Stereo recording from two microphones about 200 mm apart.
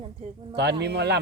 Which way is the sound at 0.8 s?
55° right (ahead or behind).